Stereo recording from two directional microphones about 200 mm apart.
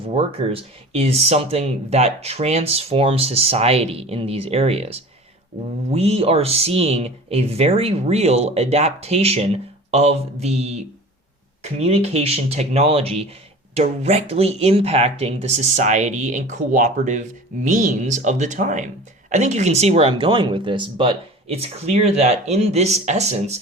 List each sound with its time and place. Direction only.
0.1 s speech: 30° right (ahead or behind)